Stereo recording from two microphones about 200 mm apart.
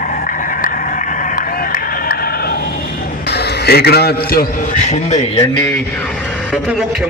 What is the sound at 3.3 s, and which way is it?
A man's voice, 50° left (ahead or behind).